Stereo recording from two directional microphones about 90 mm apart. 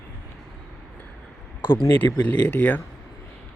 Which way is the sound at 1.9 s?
20° left (ahead or behind).